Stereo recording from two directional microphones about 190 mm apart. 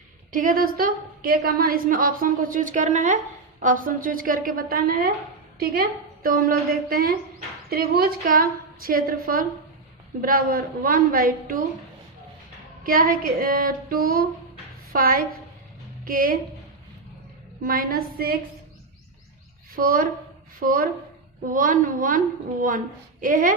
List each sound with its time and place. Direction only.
0.3 s a woman's voice: 45° right (ahead or behind)
6.2 s a woman's voice: 50° right (ahead or behind)
12.8 s a woman's voice: 50° right (ahead or behind)
17.6 s a woman's voice: 50° right (ahead or behind)
19.7 s a woman's voice: 50° right (ahead or behind)
23.2 s a woman's voice: 45° right (ahead or behind)